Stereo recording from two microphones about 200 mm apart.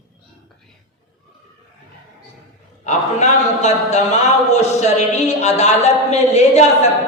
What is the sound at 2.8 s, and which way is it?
A man's voice, 35° left (ahead or behind).